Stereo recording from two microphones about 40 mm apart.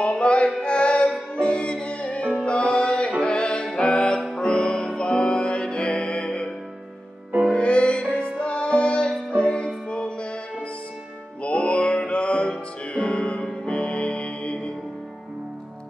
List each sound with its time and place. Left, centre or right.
0.0 s music: left
7.5 s music: left
11.4 s music: left